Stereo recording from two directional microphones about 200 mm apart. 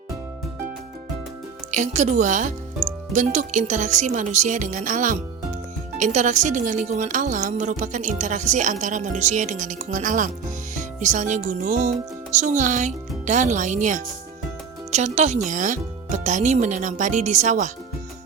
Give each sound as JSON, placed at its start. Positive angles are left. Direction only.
{"t": 1.7, "sound": "speech", "side_deg": -35}